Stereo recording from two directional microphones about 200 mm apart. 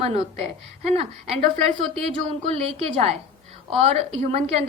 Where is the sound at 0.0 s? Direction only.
30° right (ahead or behind).